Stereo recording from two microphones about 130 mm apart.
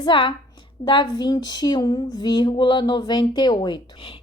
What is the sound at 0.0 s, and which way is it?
Speech, 40° left (ahead or behind).